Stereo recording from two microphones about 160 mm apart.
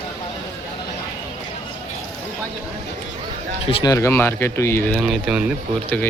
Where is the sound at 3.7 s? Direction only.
25° left (ahead or behind).